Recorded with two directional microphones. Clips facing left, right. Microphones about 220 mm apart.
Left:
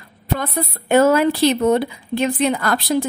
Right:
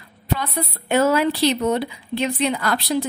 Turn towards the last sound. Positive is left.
turn(degrees=50)  # may be behind; listen again after turning